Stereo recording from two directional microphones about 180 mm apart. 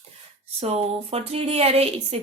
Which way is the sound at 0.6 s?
35° right (ahead or behind).